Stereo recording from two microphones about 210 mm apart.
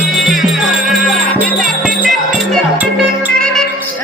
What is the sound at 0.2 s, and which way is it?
Music, centre (ahead or behind).